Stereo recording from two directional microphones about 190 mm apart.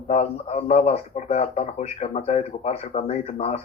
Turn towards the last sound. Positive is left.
turn(degrees=35)  # may be behind; listen again after turning